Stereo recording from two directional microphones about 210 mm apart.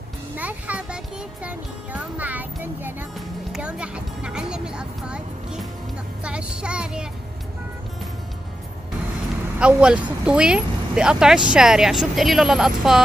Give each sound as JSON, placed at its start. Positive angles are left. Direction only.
{"t": 0.4, "sound": "a child's voice", "side_deg": -5}
{"t": 9.6, "sound": "a child's voice", "side_deg": -5}